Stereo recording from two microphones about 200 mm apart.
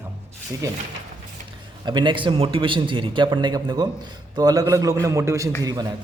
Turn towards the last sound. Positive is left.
turn(degrees=-20)  # may be behind; listen again after turning